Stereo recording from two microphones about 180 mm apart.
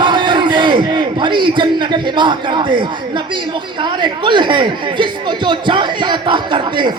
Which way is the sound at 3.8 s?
25° right (ahead or behind).